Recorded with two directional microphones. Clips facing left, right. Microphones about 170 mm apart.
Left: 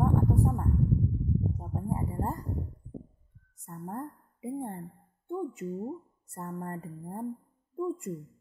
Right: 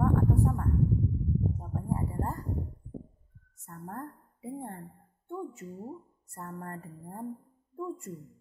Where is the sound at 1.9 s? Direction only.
20° left (ahead or behind).